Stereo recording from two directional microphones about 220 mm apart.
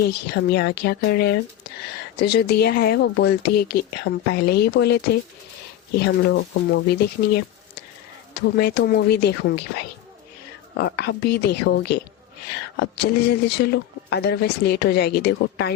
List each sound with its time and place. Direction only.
0.0 s a man's voice: 50° left (ahead or behind)
6.0 s a man's voice: 45° left (ahead or behind)
8.5 s a man's voice: 50° left (ahead or behind)
10.8 s a man's voice: 50° left (ahead or behind)